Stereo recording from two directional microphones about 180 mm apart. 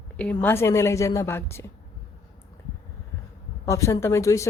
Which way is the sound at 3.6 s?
15° left (ahead or behind).